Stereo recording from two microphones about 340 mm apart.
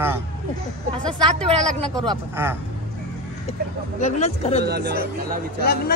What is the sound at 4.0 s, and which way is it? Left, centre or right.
Speech, left.